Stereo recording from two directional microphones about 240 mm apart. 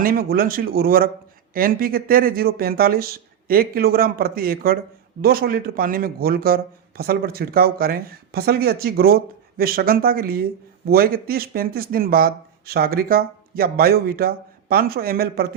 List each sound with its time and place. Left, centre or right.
0.0 s a man's voice: right